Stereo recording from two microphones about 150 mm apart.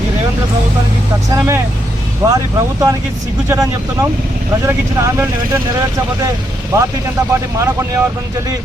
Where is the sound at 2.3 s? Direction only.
20° right (ahead or behind).